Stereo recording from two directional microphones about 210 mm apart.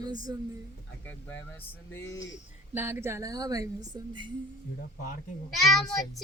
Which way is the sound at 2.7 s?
10° right (ahead or behind).